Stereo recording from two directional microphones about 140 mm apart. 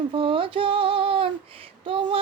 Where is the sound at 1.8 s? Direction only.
35° right (ahead or behind).